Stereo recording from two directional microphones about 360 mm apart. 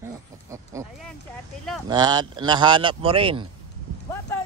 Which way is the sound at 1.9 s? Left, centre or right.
Centre.